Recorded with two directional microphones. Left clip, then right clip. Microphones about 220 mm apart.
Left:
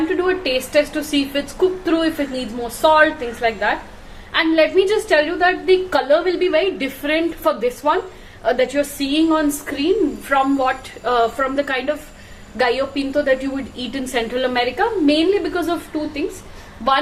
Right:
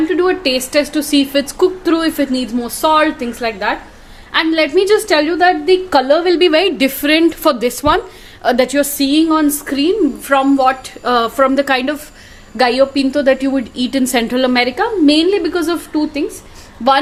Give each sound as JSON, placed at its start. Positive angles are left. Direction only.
{"t": 0.2, "sound": "a woman's voice", "side_deg": -45}